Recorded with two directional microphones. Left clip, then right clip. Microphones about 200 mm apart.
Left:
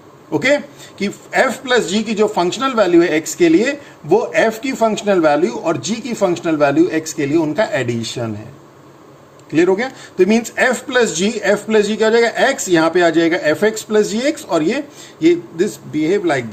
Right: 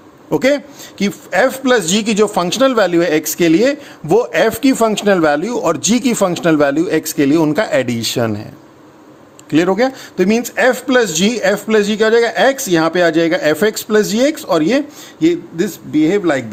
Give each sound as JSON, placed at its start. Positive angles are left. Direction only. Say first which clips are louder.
{"t": 0.3, "sound": "speech", "louder": "right 1 dB", "side_deg": -45}
{"t": 9.5, "sound": "speech", "louder": "right 2 dB", "side_deg": -45}